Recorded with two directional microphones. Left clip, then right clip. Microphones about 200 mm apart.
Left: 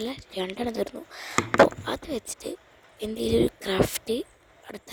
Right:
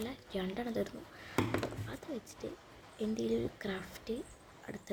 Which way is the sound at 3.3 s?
55° left (ahead or behind).